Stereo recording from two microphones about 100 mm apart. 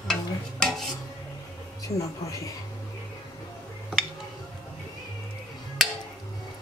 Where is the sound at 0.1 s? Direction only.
5° left (ahead or behind).